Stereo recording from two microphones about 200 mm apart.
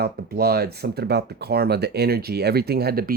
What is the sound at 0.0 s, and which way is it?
Speech, 50° right (ahead or behind).